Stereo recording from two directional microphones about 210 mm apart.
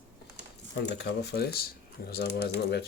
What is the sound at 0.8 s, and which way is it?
Speech, 55° left (ahead or behind).